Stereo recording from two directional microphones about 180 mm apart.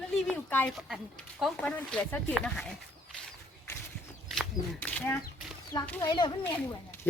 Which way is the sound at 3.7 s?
10° left (ahead or behind).